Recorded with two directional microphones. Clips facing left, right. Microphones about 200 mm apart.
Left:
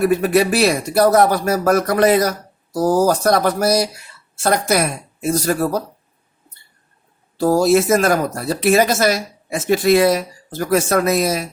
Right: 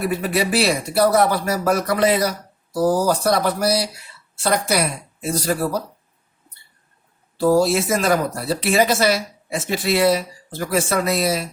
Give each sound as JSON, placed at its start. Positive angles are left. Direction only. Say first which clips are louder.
{"t": 0.0, "sound": "speech", "louder": "left 6 dB", "side_deg": 50}
{"t": 7.3, "sound": "speech", "louder": "left 2 dB", "side_deg": 45}